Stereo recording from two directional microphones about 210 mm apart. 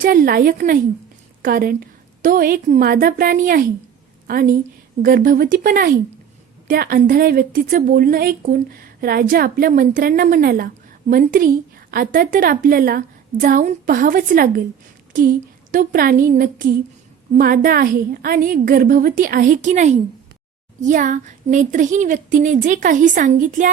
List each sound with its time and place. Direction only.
0.0 s a woman's voice: 40° right (ahead or behind)